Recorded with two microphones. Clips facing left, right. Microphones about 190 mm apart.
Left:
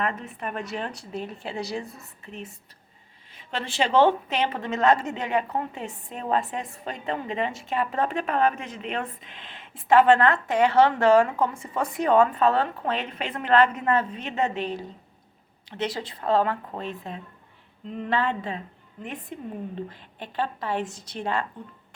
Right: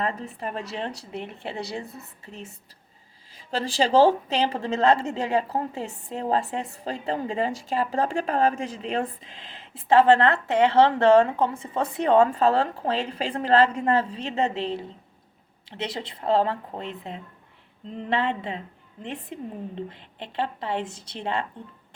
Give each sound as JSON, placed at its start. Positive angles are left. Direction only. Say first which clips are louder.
{"t": 0.0, "sound": "a woman's voice", "louder": "even", "side_deg": -30}
{"t": 3.3, "sound": "a woman's voice", "louder": "right 3 dB", "side_deg": -35}